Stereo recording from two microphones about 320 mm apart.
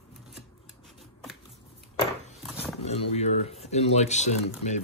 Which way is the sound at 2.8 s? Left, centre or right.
Centre.